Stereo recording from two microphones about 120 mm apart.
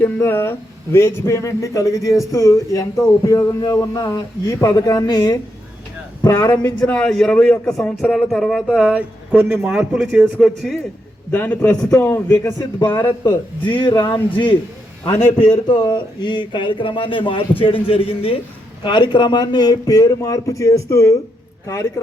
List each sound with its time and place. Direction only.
0.0 s a man's voice: 20° left (ahead or behind); by 5.2 s 35° left (ahead or behind)
6.2 s speech: 35° left (ahead or behind)
6.7 s a man's voice: 10° left (ahead or behind)
8.8 s speech: 10° right (ahead or behind)
11.3 s a man's voice: 15° left (ahead or behind)